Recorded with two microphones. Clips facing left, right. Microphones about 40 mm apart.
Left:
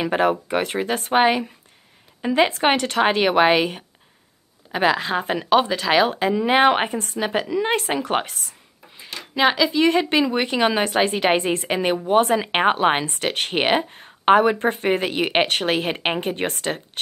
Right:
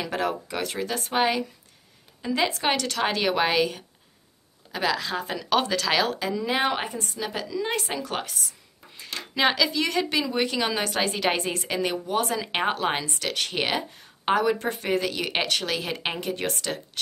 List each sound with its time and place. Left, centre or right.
0.0 s speech: left
5.5 s speech: centre; by 8.5 s left
8.9 s speech: centre; by 17.0 s left